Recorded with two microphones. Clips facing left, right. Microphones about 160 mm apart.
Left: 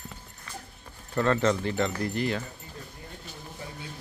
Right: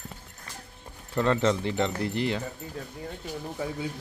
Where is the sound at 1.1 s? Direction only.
15° right (ahead or behind).